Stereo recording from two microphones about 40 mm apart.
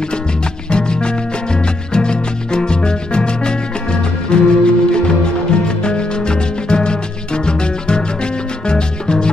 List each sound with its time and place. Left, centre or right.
0.7 s music: left